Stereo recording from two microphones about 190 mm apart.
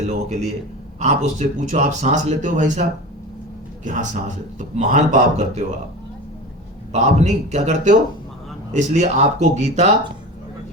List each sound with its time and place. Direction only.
0.0 s speech: 40° right (ahead or behind)
3.8 s speech: 40° right (ahead or behind)
6.9 s speech: 35° right (ahead or behind)